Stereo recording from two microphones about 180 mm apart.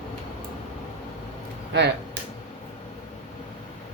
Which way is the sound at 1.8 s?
70° right (ahead or behind).